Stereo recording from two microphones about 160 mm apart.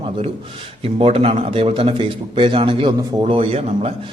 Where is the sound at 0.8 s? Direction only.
35° right (ahead or behind).